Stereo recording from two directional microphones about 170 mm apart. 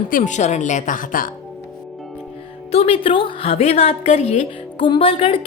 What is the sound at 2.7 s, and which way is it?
A woman's voice, 35° left (ahead or behind).